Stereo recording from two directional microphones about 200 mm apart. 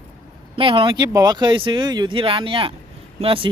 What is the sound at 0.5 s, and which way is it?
Speech, 25° right (ahead or behind).